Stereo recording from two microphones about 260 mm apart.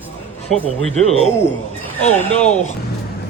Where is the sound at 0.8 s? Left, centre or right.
Centre.